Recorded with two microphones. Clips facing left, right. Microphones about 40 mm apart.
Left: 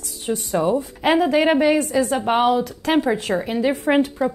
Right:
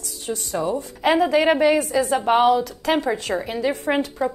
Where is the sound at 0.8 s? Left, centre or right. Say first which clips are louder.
Left 1 dB; centre.